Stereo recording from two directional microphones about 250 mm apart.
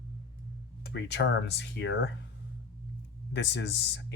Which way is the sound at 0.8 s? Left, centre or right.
Left.